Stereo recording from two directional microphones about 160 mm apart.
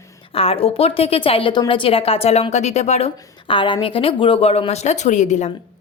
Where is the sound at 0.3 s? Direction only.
35° left (ahead or behind).